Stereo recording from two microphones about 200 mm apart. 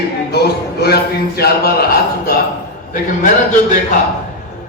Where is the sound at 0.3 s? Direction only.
55° left (ahead or behind).